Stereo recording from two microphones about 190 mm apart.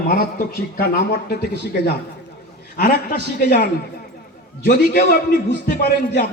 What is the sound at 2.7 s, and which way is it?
Speech, 50° left (ahead or behind).